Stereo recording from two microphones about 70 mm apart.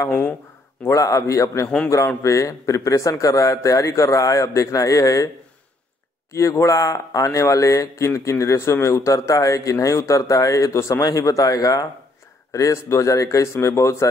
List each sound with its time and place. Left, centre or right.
0.8 s a man's voice: left
6.3 s a man's voice: left
11.0 s a man's voice: left